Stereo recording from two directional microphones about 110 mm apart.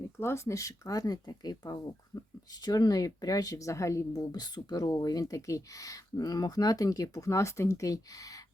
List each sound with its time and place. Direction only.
0.2 s speech: 25° left (ahead or behind)